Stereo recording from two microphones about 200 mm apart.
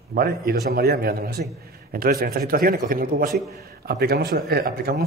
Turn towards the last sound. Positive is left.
turn(degrees=-50)  # may be behind; listen again after turning